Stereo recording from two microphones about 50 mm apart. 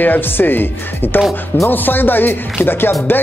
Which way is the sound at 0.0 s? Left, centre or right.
Left.